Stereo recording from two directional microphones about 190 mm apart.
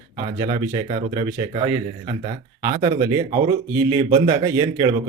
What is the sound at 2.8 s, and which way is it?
A man's voice, 20° right (ahead or behind).